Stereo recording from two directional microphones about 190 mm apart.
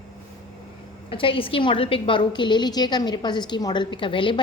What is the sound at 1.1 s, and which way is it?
A woman's voice, 30° left (ahead or behind).